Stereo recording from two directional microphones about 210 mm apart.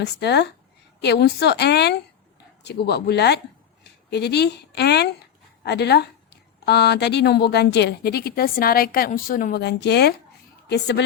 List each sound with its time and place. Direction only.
0.0 s a woman's voice: 50° left (ahead or behind)